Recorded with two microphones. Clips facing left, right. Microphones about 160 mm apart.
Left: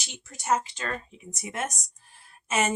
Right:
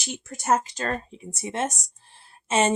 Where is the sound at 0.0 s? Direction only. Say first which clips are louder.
Right 7 dB; 45° right (ahead or behind).